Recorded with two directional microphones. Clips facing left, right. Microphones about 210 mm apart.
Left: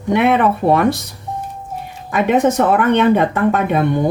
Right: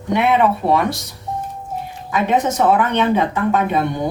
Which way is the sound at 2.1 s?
55° left (ahead or behind).